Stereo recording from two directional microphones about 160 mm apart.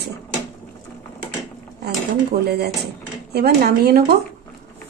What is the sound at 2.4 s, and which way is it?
Speech, 90° right.